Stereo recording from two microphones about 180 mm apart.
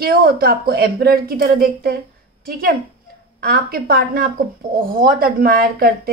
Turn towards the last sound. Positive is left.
turn(degrees=-55)  # may be behind; listen again after turning